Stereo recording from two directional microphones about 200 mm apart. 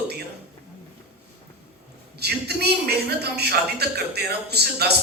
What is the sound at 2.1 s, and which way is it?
A woman's voice, 55° right (ahead or behind).